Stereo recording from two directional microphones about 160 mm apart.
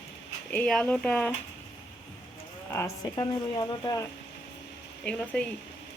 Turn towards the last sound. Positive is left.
turn(degrees=10)  # may be behind; listen again after turning